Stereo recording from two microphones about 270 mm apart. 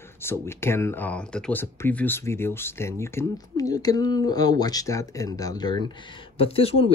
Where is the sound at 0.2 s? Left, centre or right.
Centre.